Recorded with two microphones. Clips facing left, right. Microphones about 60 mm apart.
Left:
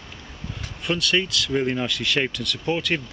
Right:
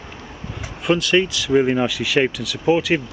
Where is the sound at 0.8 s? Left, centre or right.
Centre.